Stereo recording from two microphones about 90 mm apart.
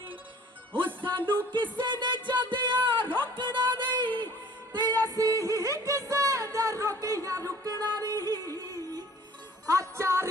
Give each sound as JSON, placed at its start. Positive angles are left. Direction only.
{"t": 0.8, "sound": "music", "side_deg": -25}
{"t": 1.5, "sound": "speech", "side_deg": -60}
{"t": 4.7, "sound": "music", "side_deg": -55}
{"t": 5.0, "sound": "a sound", "side_deg": -40}
{"t": 9.6, "sound": "music", "side_deg": -35}